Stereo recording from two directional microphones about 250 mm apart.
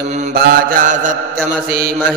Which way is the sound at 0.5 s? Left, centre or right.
Right.